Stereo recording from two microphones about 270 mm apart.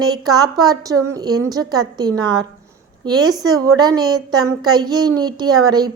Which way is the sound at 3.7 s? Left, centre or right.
Centre.